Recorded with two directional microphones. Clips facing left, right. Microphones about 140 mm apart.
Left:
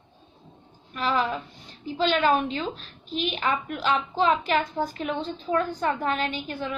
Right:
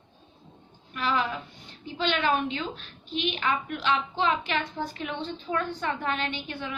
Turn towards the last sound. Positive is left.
turn(degrees=40)  # may be behind; listen again after turning